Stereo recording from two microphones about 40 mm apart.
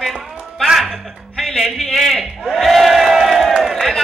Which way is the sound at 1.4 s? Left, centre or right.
Centre.